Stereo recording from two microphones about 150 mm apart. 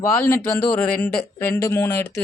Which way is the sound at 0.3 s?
20° left (ahead or behind).